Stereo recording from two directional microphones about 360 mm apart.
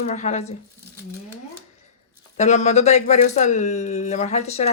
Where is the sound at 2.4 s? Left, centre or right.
Centre.